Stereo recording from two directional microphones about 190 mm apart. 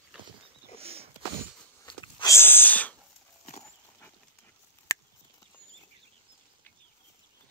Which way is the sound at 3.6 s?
10° left (ahead or behind).